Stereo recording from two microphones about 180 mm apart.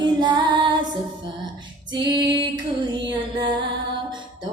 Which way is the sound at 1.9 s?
25° right (ahead or behind).